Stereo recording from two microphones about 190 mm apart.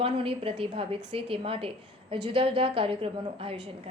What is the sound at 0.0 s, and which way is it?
A woman's voice, 30° right (ahead or behind).